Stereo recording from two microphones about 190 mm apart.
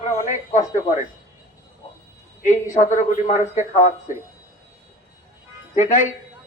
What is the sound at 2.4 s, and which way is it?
A man's voice, 40° left (ahead or behind).